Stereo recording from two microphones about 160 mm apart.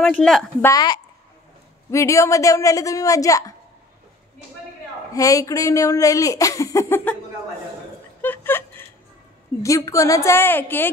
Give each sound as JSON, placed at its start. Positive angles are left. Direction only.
{"t": 0.0, "sound": "speech", "side_deg": 5}
{"t": 0.7, "sound": "speech", "side_deg": 25}
{"t": 5.1, "sound": "speech", "side_deg": 20}
{"t": 8.2, "sound": "a sound", "side_deg": 10}
{"t": 9.6, "sound": "a woman's voice", "side_deg": 20}